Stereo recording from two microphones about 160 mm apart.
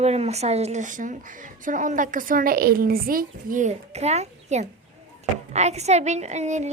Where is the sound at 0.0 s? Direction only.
40° right (ahead or behind).